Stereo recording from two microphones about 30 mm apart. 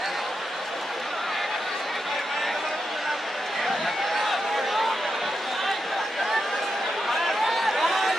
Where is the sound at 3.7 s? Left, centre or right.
Centre.